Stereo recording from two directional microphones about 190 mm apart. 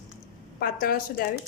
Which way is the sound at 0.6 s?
50° left (ahead or behind).